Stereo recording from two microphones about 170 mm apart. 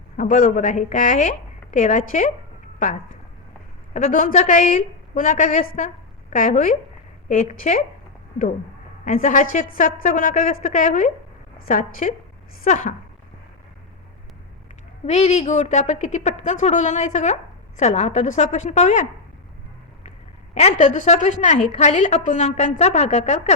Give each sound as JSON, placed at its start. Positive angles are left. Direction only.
{"t": 0.2, "sound": "a woman's voice", "side_deg": 50}
{"t": 9.0, "sound": "a woman's voice", "side_deg": 50}
{"t": 15.0, "sound": "a woman's voice", "side_deg": 40}
{"t": 20.1, "sound": "a woman's voice", "side_deg": 40}